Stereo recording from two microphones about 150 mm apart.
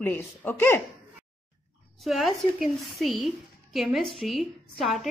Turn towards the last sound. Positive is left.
turn(degrees=0)  # may be behind; listen again after turning